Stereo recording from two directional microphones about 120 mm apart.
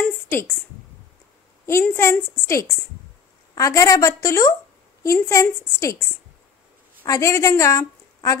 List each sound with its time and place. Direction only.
0.3 s speech: 20° left (ahead or behind)
1.7 s a woman's voice: 20° left (ahead or behind)
7.1 s a woman's voice: 25° left (ahead or behind)